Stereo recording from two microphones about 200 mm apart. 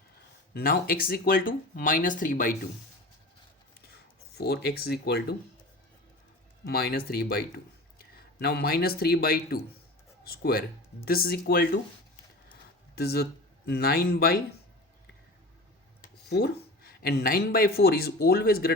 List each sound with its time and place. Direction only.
0.5 s speech: 45° left (ahead or behind)
4.4 s speech: 55° left (ahead or behind)
6.7 s speech: 50° left (ahead or behind)
13.0 s speech: 55° left (ahead or behind)
16.3 s speech: 50° left (ahead or behind)